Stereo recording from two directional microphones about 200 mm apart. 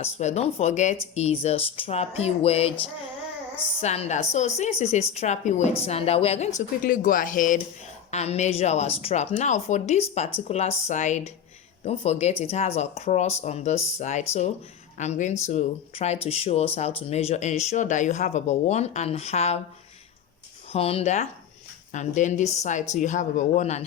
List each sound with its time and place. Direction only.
0.0 s speech: 35° left (ahead or behind)
3.8 s speech: 30° left (ahead or behind)
6.8 s speech: 40° left (ahead or behind)
20.7 s speech: 30° left (ahead or behind)